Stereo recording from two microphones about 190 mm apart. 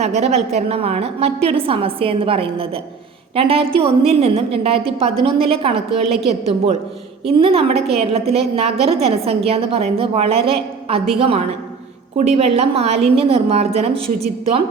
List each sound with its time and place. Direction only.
0.0 s a woman's voice: 35° right (ahead or behind)